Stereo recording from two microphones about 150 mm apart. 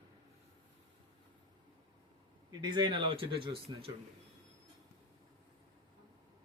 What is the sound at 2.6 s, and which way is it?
Speech, 30° right (ahead or behind).